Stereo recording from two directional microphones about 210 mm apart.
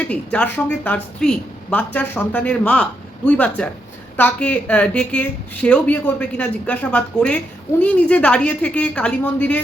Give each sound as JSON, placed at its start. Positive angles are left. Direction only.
{"t": 0.1, "sound": "a woman's voice", "side_deg": 5}